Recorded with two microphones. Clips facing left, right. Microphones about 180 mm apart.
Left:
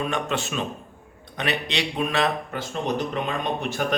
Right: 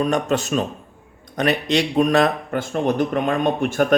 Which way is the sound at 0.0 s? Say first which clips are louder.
Right 7 dB; 40° right (ahead or behind).